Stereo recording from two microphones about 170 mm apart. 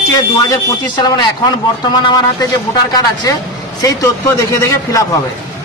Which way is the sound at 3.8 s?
20° left (ahead or behind).